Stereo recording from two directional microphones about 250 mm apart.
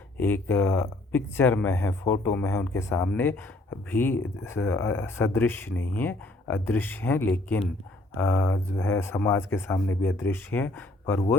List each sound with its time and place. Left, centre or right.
0.2 s speech: centre